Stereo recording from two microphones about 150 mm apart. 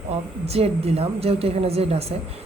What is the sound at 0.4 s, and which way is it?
A woman's voice, 45° right (ahead or behind).